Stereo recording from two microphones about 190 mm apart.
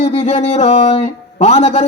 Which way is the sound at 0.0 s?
30° left (ahead or behind).